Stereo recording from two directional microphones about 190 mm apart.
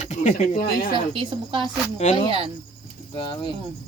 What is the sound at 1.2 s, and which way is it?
Speech, 25° right (ahead or behind).